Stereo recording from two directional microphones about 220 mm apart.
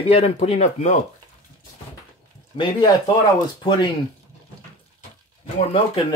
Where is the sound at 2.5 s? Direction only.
20° left (ahead or behind).